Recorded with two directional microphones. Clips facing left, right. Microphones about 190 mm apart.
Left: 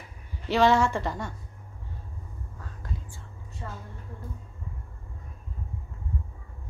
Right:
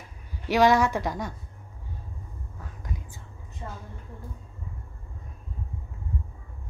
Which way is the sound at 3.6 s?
20° right (ahead or behind).